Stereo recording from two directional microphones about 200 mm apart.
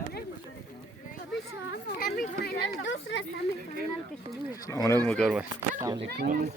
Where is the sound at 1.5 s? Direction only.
55° left (ahead or behind).